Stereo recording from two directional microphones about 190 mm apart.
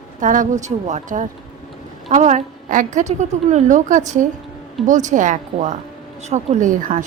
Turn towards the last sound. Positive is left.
turn(degrees=-40)  # may be behind; listen again after turning